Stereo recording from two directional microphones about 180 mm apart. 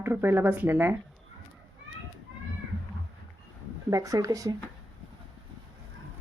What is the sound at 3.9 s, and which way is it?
Speech, 20° right (ahead or behind).